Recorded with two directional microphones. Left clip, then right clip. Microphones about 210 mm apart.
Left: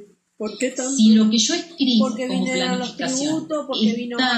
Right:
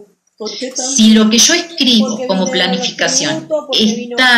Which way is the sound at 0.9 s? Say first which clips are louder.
Right 9 dB; 20° right (ahead or behind).